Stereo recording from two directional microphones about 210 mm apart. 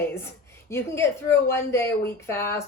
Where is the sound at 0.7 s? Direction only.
10° left (ahead or behind).